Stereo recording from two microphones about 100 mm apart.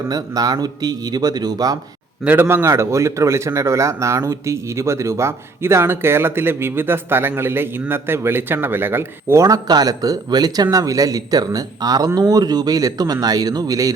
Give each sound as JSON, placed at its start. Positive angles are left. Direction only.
{"t": 0.1, "sound": "speech", "side_deg": -40}
{"t": 2.2, "sound": "a man's voice", "side_deg": -20}